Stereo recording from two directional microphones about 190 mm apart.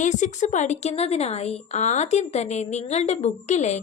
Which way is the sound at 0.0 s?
40° left (ahead or behind).